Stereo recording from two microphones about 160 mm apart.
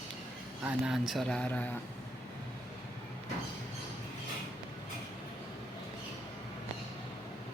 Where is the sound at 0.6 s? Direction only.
5° right (ahead or behind).